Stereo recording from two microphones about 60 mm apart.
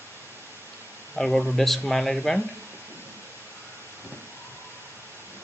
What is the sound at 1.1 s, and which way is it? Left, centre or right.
Speech, centre.